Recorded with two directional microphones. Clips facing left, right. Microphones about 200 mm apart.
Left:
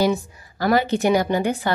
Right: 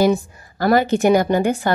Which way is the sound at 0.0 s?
45° right (ahead or behind).